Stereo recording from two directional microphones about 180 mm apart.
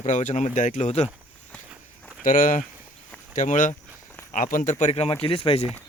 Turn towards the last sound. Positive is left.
turn(degrees=30)  # may be behind; listen again after turning